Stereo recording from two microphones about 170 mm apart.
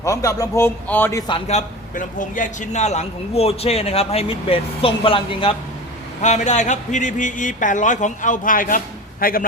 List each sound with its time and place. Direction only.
0.0 s a man's voice: 20° left (ahead or behind)
1.5 s a man's voice: 45° left (ahead or behind)
6.2 s a man's voice: 45° left (ahead or behind)